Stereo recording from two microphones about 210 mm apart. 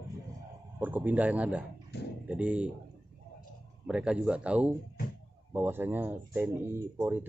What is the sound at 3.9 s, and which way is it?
Speech, 5° right (ahead or behind).